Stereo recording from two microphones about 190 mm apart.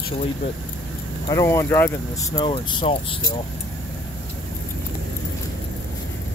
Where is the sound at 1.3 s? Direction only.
15° left (ahead or behind).